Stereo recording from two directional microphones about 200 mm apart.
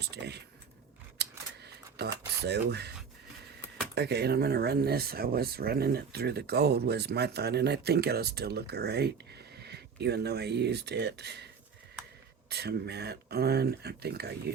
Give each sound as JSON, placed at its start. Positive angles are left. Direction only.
{"t": 0.0, "sound": "speech", "side_deg": -55}
{"t": 1.2, "sound": "scissors", "side_deg": -55}
{"t": 2.4, "sound": "speech", "side_deg": -55}
{"t": 3.9, "sound": "speech", "side_deg": -55}
{"t": 12.5, "sound": "speech", "side_deg": -55}